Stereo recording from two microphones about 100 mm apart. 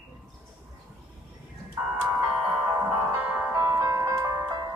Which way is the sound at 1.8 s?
35° right (ahead or behind).